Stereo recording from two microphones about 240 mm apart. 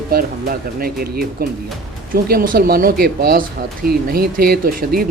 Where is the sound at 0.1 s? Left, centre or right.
Right.